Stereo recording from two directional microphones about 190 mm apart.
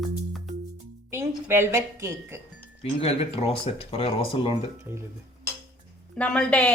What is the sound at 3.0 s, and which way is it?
Speech, 30° left (ahead or behind).